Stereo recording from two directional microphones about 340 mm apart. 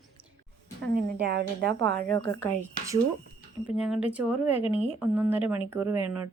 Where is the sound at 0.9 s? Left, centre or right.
Right.